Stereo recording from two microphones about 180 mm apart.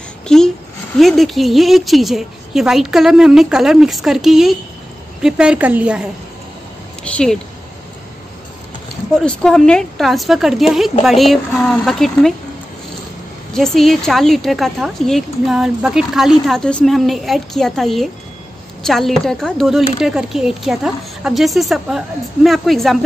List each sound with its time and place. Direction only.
0.3 s a woman's voice: 5° left (ahead or behind)
7.1 s a woman's voice: 5° left (ahead or behind)
9.1 s a woman's voice: 5° left (ahead or behind)
13.5 s a woman's voice: centre (ahead or behind)